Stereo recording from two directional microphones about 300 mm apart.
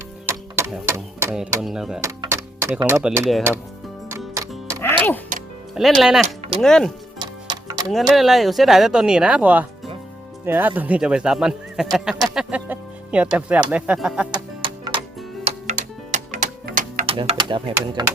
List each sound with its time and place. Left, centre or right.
0.3 s speech: centre
4.1 s music: centre
5.7 s speech: centre
6.2 s speech: centre
6.6 s speech: centre
7.2 s music: centre
7.9 s speech: centre
14.3 s music: centre
16.1 s music: right